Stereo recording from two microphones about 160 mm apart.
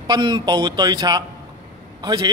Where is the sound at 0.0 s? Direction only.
25° right (ahead or behind).